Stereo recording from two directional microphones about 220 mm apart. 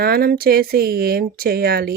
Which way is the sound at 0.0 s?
45° right (ahead or behind).